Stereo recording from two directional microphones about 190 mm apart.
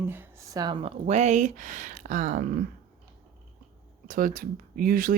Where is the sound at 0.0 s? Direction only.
10° right (ahead or behind); by 2.6 s 40° right (ahead or behind).